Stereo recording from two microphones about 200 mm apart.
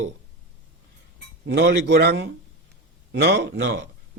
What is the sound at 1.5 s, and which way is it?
Speech, 60° right (ahead or behind).